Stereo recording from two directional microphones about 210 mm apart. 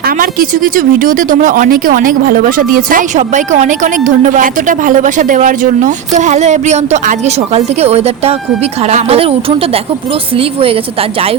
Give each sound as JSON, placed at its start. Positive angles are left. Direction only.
{"t": 0.0, "sound": "a woman's voice", "side_deg": -40}